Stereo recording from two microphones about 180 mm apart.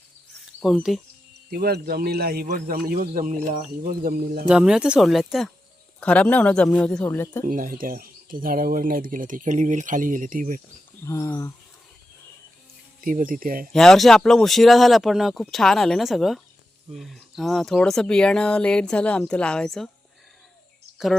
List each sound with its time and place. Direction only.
0.6 s speech: centre (ahead or behind)
1.5 s a man's voice: 60° right (ahead or behind)
4.4 s speech: 5° right (ahead or behind); by 7.4 s 15° left (ahead or behind)
7.4 s speech: 50° right (ahead or behind)
11.0 s speech: 15° left (ahead or behind)
13.0 s speech: 50° right (ahead or behind)
13.7 s speech: centre (ahead or behind)